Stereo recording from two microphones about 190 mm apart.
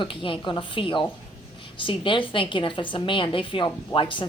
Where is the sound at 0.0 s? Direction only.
25° left (ahead or behind).